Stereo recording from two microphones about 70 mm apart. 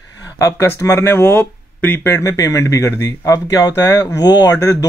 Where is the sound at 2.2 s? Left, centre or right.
Left.